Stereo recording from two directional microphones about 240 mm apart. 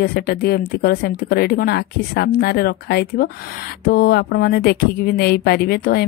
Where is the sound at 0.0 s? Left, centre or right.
Left.